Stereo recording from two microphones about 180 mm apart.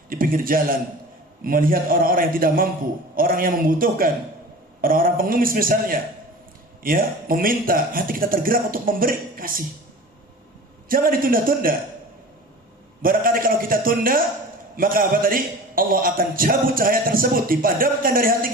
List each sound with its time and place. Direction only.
0.1 s a man's voice: 50° right (ahead or behind)
10.8 s a man's voice: 50° right (ahead or behind)
13.0 s a man's voice: 50° right (ahead or behind)